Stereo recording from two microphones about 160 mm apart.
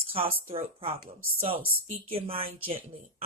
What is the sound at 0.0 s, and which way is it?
Speech, 35° right (ahead or behind).